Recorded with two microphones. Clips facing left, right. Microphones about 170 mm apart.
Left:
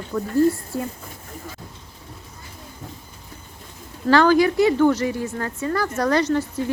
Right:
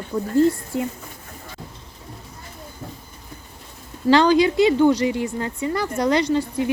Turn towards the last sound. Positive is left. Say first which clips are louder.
# right 1 dB
turn(degrees=-15)  # may be behind; listen again after turning